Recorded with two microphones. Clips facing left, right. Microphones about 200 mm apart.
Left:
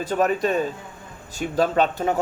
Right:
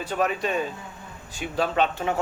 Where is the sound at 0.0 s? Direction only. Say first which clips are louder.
Left 4 dB; 40° left (ahead or behind).